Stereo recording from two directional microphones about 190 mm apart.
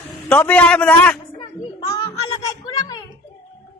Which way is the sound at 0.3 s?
10° left (ahead or behind).